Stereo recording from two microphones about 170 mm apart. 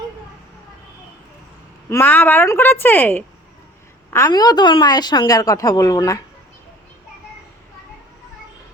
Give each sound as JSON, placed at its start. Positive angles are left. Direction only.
{"t": 1.9, "sound": "a woman's voice", "side_deg": 10}